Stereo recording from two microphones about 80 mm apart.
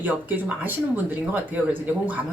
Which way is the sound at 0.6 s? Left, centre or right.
Right.